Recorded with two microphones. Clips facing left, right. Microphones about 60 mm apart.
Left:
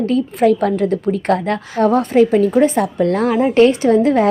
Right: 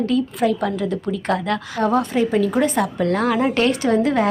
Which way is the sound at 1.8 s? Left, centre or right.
Left.